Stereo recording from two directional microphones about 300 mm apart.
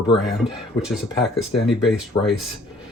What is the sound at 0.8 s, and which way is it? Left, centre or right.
Speech, centre.